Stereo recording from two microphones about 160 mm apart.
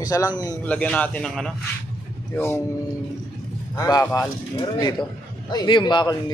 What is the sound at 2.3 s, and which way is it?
Speech, 15° left (ahead or behind).